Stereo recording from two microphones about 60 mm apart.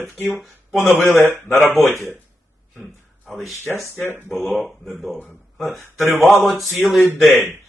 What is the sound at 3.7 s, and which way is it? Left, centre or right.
Speech, centre.